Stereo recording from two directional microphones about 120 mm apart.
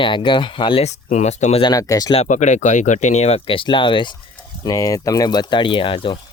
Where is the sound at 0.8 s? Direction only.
75° left (ahead or behind).